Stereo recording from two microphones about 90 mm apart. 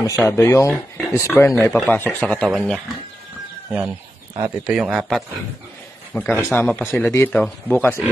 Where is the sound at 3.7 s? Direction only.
10° right (ahead or behind).